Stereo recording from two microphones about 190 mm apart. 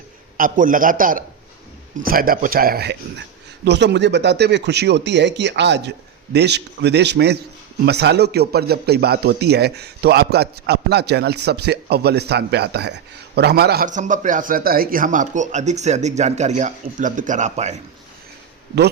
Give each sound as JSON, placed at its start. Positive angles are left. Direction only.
{"t": 0.3, "sound": "a man's voice", "side_deg": -45}